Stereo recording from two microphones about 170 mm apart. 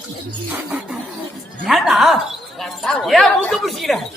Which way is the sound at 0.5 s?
10° right (ahead or behind).